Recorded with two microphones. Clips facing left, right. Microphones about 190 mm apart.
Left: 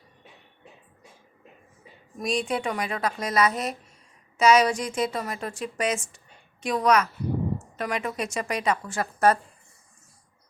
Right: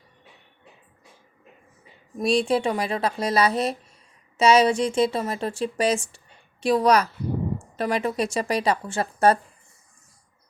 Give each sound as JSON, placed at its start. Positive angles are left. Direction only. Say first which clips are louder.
{"t": 2.1, "sound": "a woman's voice", "louder": "right 6 dB", "side_deg": -30}